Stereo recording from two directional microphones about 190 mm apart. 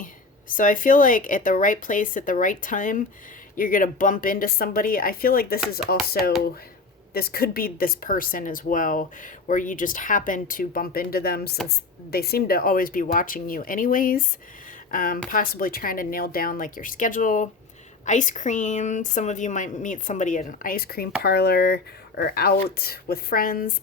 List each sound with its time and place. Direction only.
0.0 s speech: 45° left (ahead or behind)
7.1 s speech: 55° left (ahead or behind)